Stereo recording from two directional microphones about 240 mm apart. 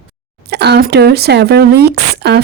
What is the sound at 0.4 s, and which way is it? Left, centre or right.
Speech, right.